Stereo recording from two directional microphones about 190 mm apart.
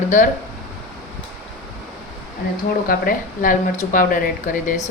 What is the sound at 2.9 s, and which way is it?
A woman's voice, 45° left (ahead or behind).